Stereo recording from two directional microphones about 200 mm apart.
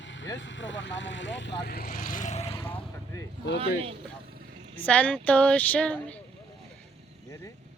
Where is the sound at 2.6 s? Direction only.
10° left (ahead or behind).